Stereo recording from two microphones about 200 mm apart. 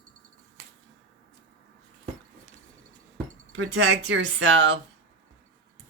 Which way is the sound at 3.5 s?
70° right (ahead or behind).